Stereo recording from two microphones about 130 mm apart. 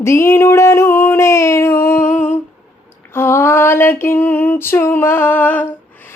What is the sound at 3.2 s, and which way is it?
Female singing, 20° left (ahead or behind).